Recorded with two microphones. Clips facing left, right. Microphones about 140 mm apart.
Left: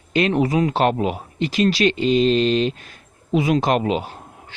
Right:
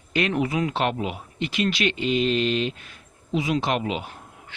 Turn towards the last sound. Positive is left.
turn(degrees=35)  # may be behind; listen again after turning